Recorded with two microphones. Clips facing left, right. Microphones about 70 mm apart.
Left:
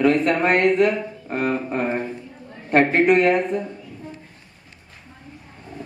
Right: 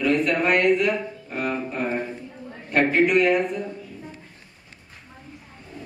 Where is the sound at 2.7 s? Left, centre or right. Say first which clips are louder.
Left 3 dB; left.